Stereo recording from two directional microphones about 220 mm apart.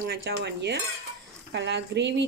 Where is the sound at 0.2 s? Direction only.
50° right (ahead or behind).